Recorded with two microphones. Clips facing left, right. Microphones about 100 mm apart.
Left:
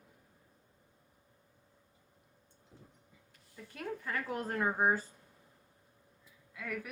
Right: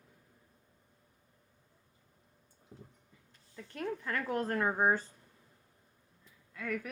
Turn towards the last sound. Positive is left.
turn(degrees=5)  # may be behind; listen again after turning